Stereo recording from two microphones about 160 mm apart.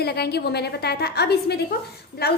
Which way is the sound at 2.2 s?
80° left.